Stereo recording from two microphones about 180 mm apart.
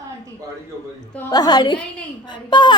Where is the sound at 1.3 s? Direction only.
20° left (ahead or behind).